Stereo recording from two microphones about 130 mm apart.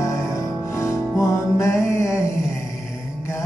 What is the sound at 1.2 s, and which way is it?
Music, 20° left (ahead or behind).